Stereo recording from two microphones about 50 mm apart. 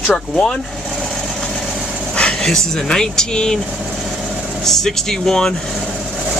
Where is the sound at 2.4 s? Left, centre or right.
Centre.